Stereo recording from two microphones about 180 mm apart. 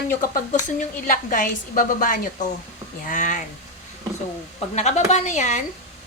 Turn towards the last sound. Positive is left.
turn(degrees=40)  # may be behind; listen again after turning